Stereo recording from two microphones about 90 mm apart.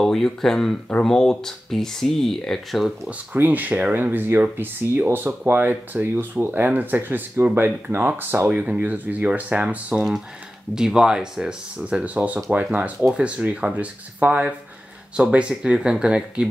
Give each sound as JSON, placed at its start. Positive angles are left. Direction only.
{"t": 0.0, "sound": "speech", "side_deg": 5}
{"t": 3.1, "sound": "speech", "side_deg": -20}